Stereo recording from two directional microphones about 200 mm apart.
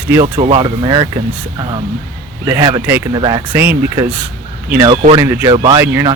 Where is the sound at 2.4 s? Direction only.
15° right (ahead or behind).